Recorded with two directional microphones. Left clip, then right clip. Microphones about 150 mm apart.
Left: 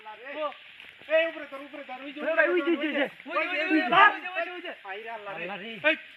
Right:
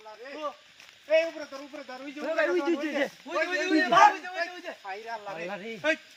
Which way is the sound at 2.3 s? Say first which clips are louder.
Left 2 dB; 35° left (ahead or behind).